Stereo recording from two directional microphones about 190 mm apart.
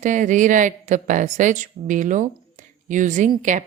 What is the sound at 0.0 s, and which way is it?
A woman's voice, 40° right (ahead or behind).